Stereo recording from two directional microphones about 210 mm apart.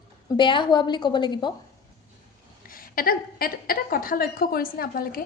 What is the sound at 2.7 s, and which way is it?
A woman's voice, 45° left (ahead or behind).